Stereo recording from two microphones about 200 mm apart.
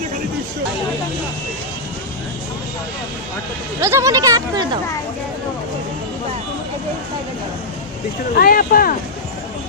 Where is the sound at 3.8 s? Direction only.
15° right (ahead or behind).